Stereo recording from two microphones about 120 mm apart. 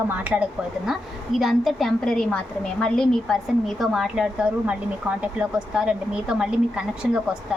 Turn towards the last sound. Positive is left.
turn(degrees=-10)  # may be behind; listen again after turning